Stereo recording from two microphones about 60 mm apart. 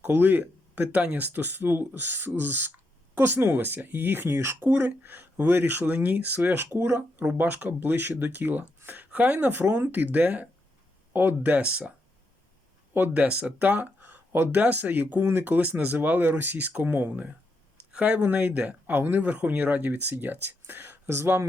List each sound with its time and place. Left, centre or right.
0.0 s speech: right
7.3 s speech: right
12.9 s speech: right
13.2 s speech: right